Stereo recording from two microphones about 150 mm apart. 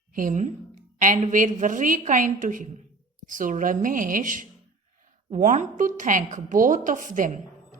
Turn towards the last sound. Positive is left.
turn(degrees=-60)  # may be behind; listen again after turning